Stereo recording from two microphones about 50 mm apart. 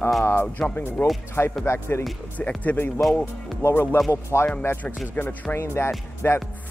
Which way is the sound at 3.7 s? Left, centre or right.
Left.